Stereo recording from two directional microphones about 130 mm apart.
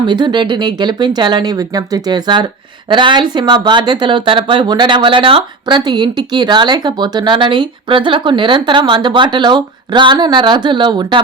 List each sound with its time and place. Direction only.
0.0 s speech: 35° right (ahead or behind)